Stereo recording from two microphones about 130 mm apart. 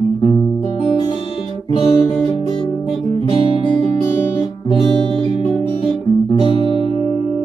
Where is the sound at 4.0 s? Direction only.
35° left (ahead or behind).